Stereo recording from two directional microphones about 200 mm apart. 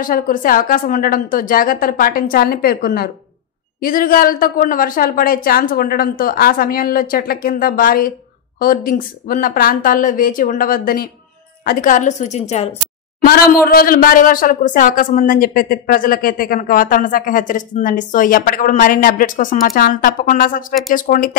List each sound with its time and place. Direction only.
0.0 s a woman's voice: 45° left (ahead or behind)
13.2 s a woman's voice: 45° left (ahead or behind)